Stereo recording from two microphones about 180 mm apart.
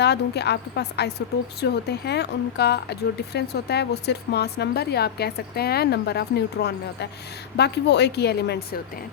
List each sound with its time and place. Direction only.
0.0 s a woman's voice: 65° left (ahead or behind)